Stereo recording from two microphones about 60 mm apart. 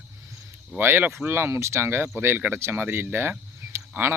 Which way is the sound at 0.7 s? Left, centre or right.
Right.